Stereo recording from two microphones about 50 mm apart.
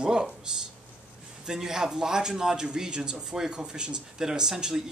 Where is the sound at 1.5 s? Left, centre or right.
Centre.